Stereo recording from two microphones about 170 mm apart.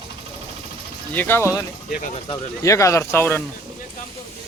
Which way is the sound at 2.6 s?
20° left (ahead or behind).